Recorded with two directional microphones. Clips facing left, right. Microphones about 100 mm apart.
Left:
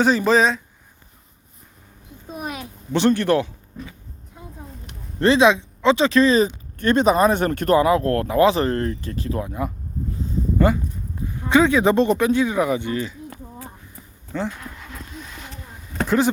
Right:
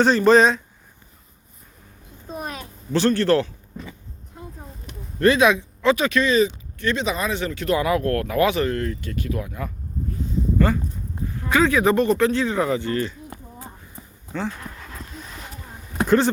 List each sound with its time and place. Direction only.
0.0 s speech: 5° left (ahead or behind)
2.3 s a sound: 10° left (ahead or behind)
5.2 s speech: 25° left (ahead or behind); by 7.8 s 50° left (ahead or behind)
7.8 s speech: 30° left (ahead or behind); by 13.1 s 10° left (ahead or behind)
13.3 s a sound: 25° right (ahead or behind)
14.6 s dog: 35° right (ahead or behind)